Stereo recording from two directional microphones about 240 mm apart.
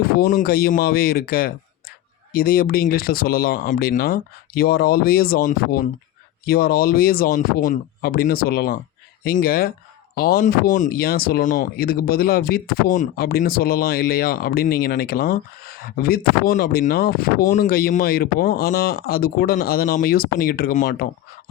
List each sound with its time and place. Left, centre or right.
0.3 s speech: left